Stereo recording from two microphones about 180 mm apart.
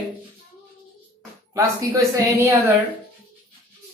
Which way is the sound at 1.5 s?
20° right (ahead or behind).